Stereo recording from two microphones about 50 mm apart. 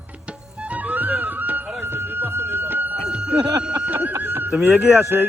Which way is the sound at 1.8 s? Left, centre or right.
Right.